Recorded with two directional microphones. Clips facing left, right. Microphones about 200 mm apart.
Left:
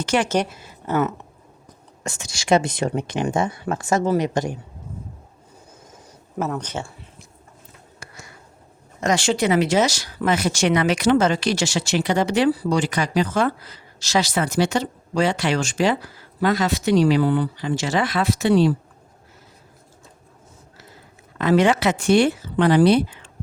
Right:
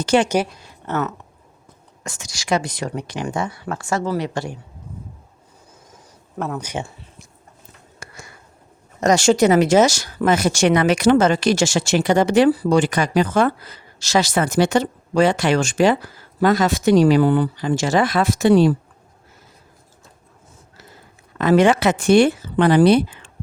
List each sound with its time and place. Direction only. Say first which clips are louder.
0.0 s a woman's voice: right 4 dB; 30° right (ahead or behind)
0.4 s speech: left 1 dB; 5° left (ahead or behind)
2.0 s speech: left 3 dB; 25° left (ahead or behind)
6.6 s speech: right 2 dB; 15° right (ahead or behind)
9.0 s speech: right 6 dB; 40° right (ahead or behind)
21.3 s speech: right 3 dB; 50° right (ahead or behind)